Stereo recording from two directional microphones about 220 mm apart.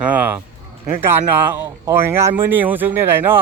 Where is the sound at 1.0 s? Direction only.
10° right (ahead or behind).